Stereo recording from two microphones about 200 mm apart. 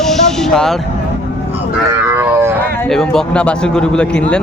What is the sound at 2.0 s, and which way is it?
Wild animals, 10° right (ahead or behind).